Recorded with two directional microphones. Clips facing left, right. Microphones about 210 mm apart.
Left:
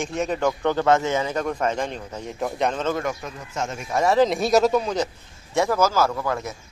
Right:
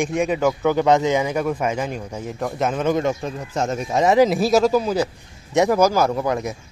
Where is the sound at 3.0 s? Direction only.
30° right (ahead or behind).